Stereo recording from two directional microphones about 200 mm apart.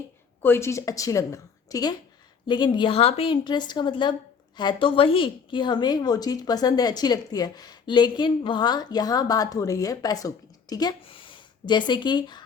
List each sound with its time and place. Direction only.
0.4 s a woman's voice: 10° left (ahead or behind)